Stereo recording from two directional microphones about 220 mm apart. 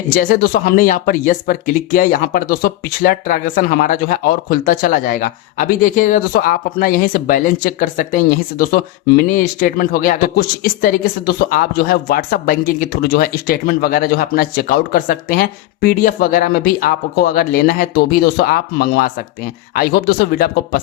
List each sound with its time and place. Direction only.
0.2 s speech: 40° left (ahead or behind)